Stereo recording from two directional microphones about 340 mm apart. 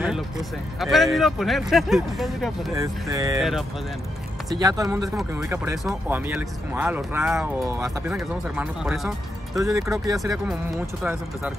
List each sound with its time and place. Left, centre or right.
0.7 s speech: centre